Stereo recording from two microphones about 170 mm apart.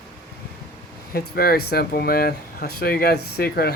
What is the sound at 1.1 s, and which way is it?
Speech, 60° left (ahead or behind).